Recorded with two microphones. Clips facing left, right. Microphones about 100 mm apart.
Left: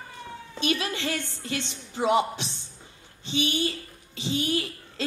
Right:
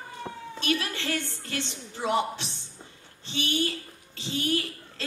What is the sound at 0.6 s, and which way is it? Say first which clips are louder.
A woman's voice: left 2 dB; 15° left (ahead or behind).